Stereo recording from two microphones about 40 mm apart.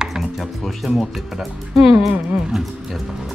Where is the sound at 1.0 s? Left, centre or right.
Centre.